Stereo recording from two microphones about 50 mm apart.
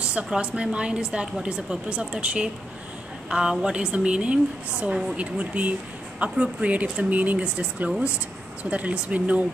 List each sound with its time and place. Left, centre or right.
0.1 s speech: right